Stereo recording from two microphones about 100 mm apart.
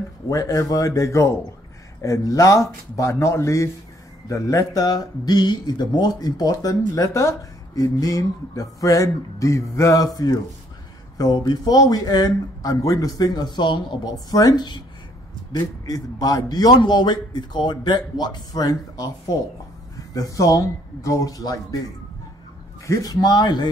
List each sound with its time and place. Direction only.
0.3 s speech: 35° left (ahead or behind)
4.8 s a man's voice: 45° left (ahead or behind)
22.8 s a man's voice: 40° left (ahead or behind)